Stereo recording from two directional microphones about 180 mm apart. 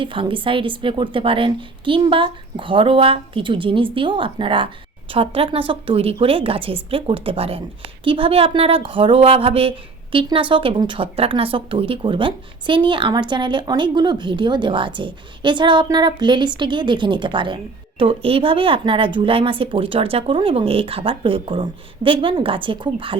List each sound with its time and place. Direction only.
0.0 s a woman's voice: 30° right (ahead or behind)